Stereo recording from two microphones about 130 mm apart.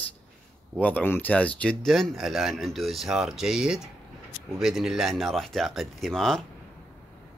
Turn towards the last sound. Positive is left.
turn(degrees=5)  # may be behind; listen again after turning